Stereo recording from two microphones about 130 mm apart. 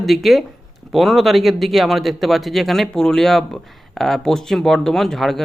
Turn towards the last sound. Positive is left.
turn(degrees=5)  # may be behind; listen again after turning